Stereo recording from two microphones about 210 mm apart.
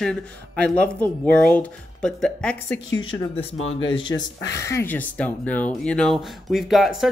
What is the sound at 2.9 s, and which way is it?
Speech, 25° left (ahead or behind).